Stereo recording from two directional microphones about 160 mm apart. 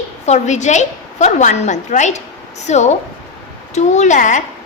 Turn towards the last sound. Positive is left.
turn(degrees=50)  # may be behind; listen again after turning